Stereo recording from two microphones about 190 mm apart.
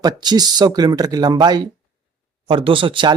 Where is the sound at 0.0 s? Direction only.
20° right (ahead or behind).